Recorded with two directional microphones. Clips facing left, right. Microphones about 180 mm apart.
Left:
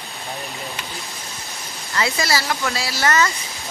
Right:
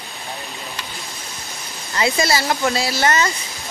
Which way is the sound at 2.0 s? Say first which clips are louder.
Right 3 dB; 20° right (ahead or behind).